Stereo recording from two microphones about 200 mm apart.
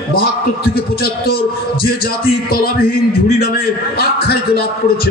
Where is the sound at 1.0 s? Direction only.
50° left (ahead or behind).